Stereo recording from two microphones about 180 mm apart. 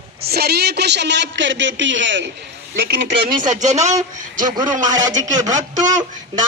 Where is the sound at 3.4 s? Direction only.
40° right (ahead or behind).